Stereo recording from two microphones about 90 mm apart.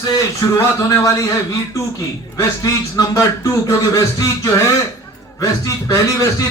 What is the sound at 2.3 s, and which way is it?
Speech, 40° left (ahead or behind).